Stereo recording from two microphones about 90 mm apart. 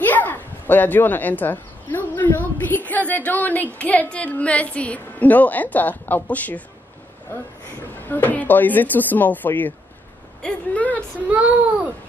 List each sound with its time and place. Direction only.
0.0 s speech: 20° left (ahead or behind)
8.0 s speech: 20° left (ahead or behind)
11.0 s speech: 15° right (ahead or behind)